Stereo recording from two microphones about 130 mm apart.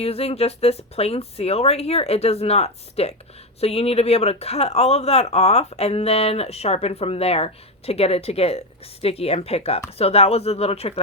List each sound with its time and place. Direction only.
0.0 s speech: 50° left (ahead or behind)